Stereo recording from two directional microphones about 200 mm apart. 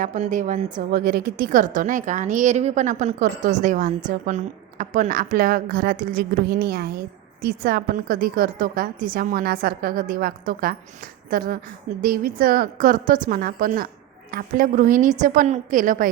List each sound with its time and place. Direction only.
0.0 s a woman's voice: 40° right (ahead or behind)